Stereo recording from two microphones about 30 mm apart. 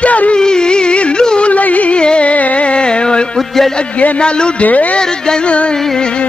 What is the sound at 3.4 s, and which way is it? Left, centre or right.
Speech, centre.